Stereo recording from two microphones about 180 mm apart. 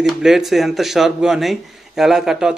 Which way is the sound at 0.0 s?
Centre (ahead or behind).